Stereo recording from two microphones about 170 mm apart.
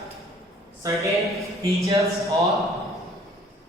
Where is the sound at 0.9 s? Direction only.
Centre (ahead or behind).